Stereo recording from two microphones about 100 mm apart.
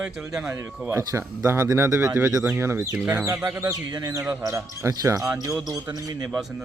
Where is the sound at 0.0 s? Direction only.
5° right (ahead or behind).